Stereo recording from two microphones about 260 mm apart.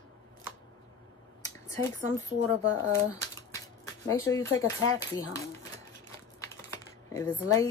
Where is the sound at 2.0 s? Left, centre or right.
Left.